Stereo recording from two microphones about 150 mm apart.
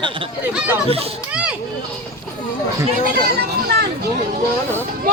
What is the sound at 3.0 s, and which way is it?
Speech, 90° right.